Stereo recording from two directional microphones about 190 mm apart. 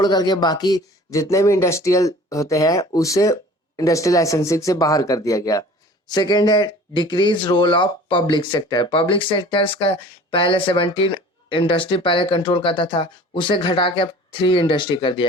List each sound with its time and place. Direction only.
0.0 s speech: 20° left (ahead or behind)